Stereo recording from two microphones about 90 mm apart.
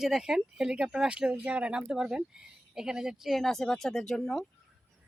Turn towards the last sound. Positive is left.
turn(degrees=5)  # may be behind; listen again after turning